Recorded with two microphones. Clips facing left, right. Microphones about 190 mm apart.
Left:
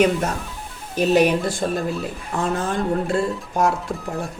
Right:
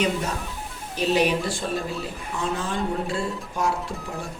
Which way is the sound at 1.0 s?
45° left (ahead or behind).